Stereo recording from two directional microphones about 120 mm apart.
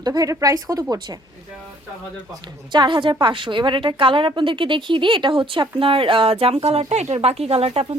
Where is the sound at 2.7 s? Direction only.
40° right (ahead or behind).